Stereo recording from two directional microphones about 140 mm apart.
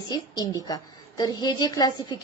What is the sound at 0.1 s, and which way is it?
A woman's voice, 30° left (ahead or behind).